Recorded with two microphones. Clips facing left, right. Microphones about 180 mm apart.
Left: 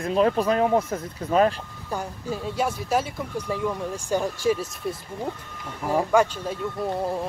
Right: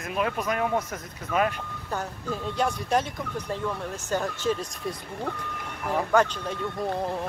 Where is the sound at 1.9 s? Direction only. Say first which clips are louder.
Left 2 dB; 10° left (ahead or behind).